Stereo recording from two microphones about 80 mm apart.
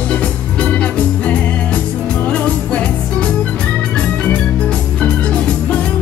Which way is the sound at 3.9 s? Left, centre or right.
Centre.